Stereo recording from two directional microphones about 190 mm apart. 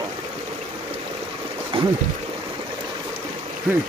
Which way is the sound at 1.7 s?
30° right (ahead or behind).